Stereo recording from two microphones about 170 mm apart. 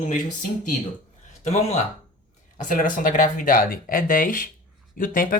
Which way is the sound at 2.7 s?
50° left (ahead or behind).